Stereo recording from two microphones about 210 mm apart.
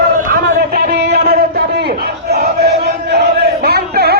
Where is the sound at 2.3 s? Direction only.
50° right (ahead or behind).